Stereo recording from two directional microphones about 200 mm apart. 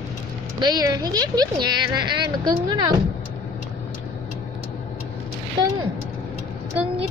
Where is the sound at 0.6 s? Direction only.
20° right (ahead or behind).